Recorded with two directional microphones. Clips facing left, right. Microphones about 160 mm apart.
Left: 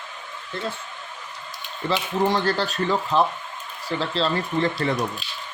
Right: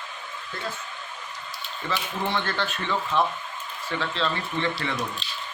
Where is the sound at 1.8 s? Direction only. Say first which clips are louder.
Left 7 dB; 40° left (ahead or behind).